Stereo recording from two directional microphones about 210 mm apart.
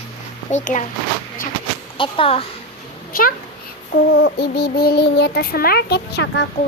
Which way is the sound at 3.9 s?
55° left (ahead or behind).